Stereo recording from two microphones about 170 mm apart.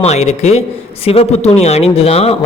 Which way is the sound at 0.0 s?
40° left (ahead or behind).